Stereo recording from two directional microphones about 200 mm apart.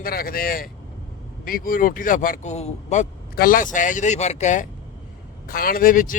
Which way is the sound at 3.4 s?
45° left (ahead or behind).